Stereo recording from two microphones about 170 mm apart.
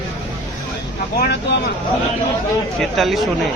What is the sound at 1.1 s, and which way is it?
Speech, 70° left (ahead or behind).